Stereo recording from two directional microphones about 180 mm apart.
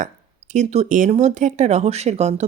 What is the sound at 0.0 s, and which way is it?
Speech, 40° right (ahead or behind).